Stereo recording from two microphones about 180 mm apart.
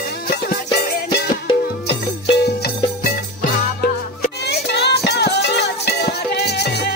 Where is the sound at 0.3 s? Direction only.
60° left (ahead or behind).